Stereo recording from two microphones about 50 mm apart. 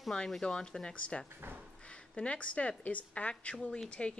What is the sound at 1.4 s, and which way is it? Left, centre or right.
Speech, right.